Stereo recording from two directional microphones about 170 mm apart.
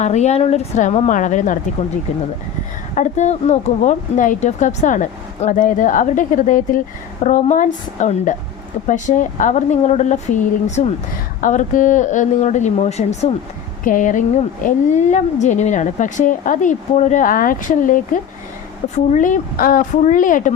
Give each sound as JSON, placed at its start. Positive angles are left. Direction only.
{"t": 0.0, "sound": "a woman's voice", "side_deg": 40}
{"t": 2.9, "sound": "a woman's voice", "side_deg": 45}